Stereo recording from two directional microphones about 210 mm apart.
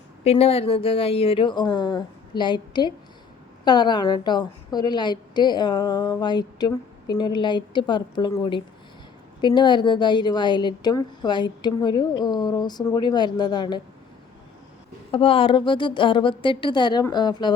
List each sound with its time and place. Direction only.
0.3 s a woman's voice: 30° left (ahead or behind)
15.1 s a woman's voice: 25° left (ahead or behind)